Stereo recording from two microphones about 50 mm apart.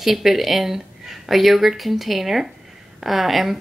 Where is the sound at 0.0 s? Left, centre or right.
Centre.